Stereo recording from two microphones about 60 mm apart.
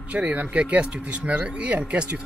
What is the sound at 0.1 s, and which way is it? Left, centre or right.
Speech, right.